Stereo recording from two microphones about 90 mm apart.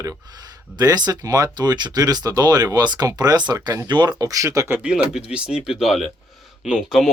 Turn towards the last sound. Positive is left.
turn(degrees=-5)  # may be behind; listen again after turning